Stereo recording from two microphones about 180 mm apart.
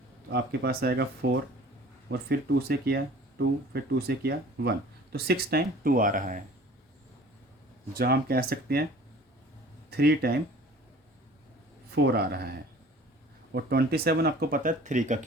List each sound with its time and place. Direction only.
0.3 s speech: 60° right (ahead or behind)
7.9 s speech: 55° right (ahead or behind)
9.9 s speech: 60° right (ahead or behind)
11.9 s speech: 60° right (ahead or behind); by 15.2 s 45° right (ahead or behind)